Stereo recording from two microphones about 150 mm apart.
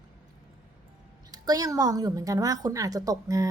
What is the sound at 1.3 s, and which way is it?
A woman's voice, 25° right (ahead or behind).